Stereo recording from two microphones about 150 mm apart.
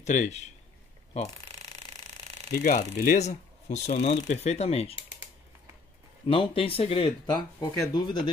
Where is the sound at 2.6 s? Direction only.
60° left (ahead or behind); by 4.9 s 45° left (ahead or behind).